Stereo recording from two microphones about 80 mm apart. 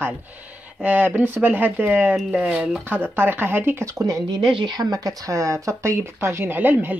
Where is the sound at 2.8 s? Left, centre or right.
Right.